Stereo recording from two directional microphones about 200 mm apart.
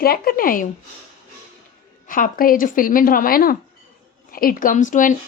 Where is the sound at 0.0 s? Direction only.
50° left (ahead or behind).